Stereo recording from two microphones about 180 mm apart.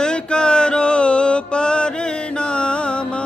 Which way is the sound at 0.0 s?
5° left (ahead or behind).